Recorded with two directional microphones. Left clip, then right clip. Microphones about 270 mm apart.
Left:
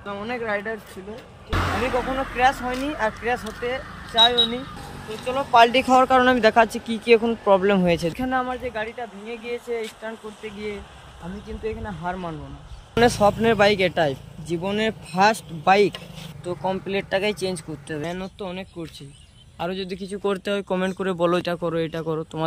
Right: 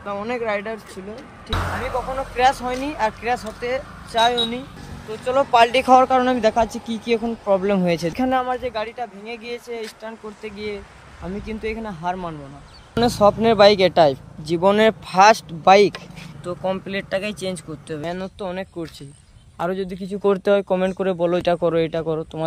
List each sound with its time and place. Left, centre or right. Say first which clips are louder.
0.0 s speech: right 4 dB; centre
2.3 s speech: right 3 dB; centre
5.5 s speech: left 1 dB; right
5.9 s speech: right 2 dB; centre
8.3 s speech: right 4 dB; right
8.6 s speech: right 3 dB; centre
19.6 s speech: right 4 dB; right
20.0 s speech: right 7 dB; right
20.3 s speech: right 8 dB; centre
20.6 s speech: right 4 dB; centre